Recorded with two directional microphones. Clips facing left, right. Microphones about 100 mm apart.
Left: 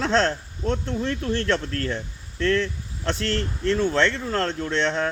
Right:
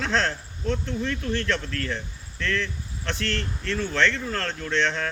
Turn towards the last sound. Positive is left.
turn(degrees=30)  # may be behind; listen again after turning